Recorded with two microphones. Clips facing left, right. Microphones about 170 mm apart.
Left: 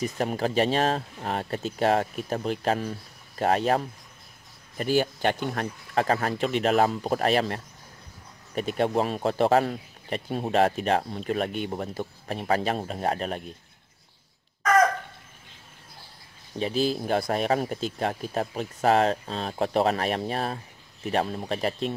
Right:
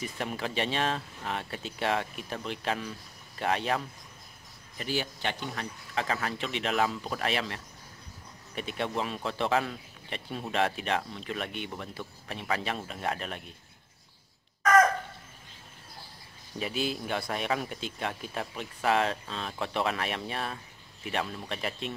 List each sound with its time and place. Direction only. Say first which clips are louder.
0.0 s speech: left 7 dB; 40° left (ahead or behind)
16.5 s speech: left 6 dB; 35° left (ahead or behind)